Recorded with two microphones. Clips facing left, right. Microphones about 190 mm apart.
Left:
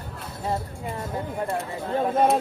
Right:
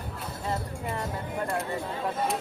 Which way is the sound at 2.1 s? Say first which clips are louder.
Left 12 dB; 60° left (ahead or behind).